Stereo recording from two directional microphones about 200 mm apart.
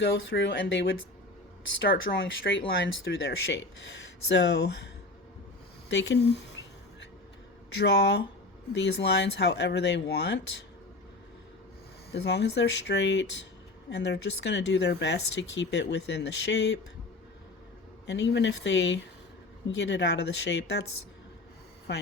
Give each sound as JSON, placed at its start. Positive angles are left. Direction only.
{"t": 0.0, "sound": "speech", "side_deg": 65}
{"t": 1.8, "sound": "speech", "side_deg": 55}
{"t": 5.9, "sound": "a sound", "side_deg": 60}
{"t": 7.8, "sound": "speech", "side_deg": 60}
{"t": 12.1, "sound": "speech", "side_deg": 55}
{"t": 18.0, "sound": "speech", "side_deg": 60}
{"t": 21.9, "sound": "speech", "side_deg": 60}